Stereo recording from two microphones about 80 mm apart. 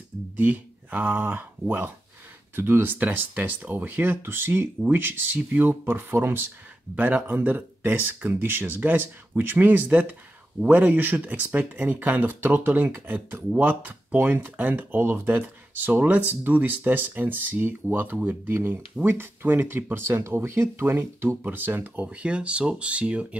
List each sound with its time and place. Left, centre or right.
0.4 s speech: centre